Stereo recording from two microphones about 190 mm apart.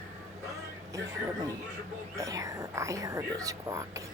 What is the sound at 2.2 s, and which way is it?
Speech, 15° right (ahead or behind).